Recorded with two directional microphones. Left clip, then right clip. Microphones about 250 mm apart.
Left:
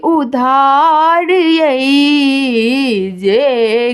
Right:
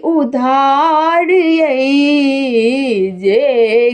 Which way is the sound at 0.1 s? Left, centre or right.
Centre.